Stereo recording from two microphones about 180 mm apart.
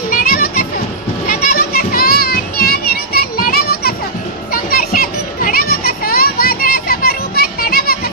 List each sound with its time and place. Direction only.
0.1 s children playing: 50° left (ahead or behind)